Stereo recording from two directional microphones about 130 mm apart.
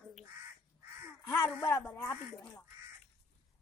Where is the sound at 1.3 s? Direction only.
25° left (ahead or behind).